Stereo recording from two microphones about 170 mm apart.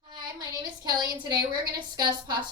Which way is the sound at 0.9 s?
25° right (ahead or behind).